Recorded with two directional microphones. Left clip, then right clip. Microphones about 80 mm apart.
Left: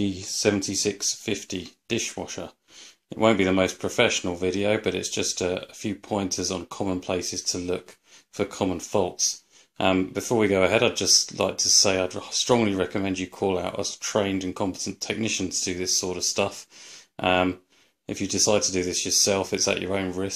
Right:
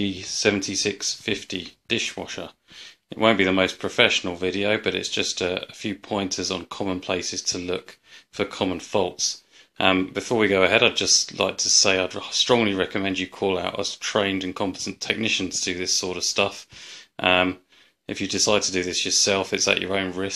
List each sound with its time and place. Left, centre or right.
0.0 s speech: left